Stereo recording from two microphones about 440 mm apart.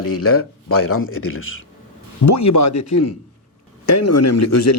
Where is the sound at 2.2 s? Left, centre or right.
Left.